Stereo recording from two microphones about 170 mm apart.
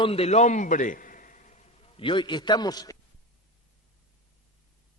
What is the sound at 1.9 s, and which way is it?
A man's voice, 30° left (ahead or behind).